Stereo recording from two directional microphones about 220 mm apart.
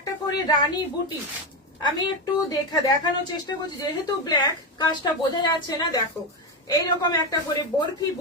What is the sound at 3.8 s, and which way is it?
A woman's voice, 15° left (ahead or behind).